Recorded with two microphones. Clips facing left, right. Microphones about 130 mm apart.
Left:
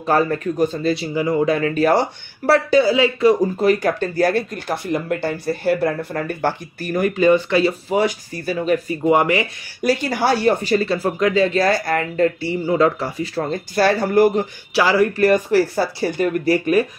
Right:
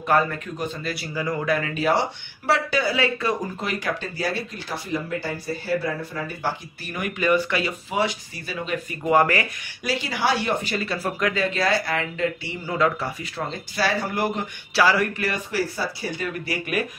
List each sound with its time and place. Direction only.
0.0 s speech: 35° left (ahead or behind)
0.9 s speech: 25° left (ahead or behind)
1.7 s speech: 45° left (ahead or behind)
2.8 s speech: 25° left (ahead or behind)
3.6 s speech: 50° left (ahead or behind); by 8.0 s 30° left (ahead or behind)
8.0 s speech: 45° left (ahead or behind)
9.0 s speech: 20° left (ahead or behind)
9.8 s speech: 45° left (ahead or behind); by 13.3 s 30° left (ahead or behind)
13.5 s speech: 50° left (ahead or behind)
14.7 s speech: 25° left (ahead or behind)
15.1 s speech: 45° left (ahead or behind)